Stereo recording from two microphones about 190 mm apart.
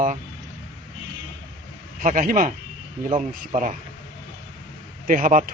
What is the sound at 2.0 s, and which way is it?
A man's voice, 45° right (ahead or behind).